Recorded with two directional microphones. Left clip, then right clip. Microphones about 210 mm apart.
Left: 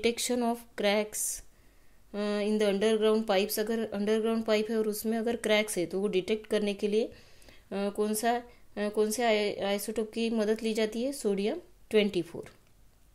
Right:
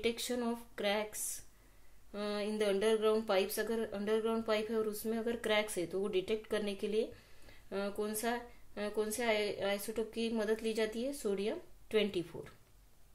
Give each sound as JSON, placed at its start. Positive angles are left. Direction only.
{"t": 0.0, "sound": "speech", "side_deg": 45}